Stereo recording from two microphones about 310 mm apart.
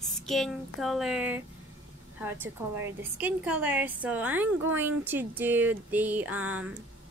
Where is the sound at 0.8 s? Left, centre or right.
Centre.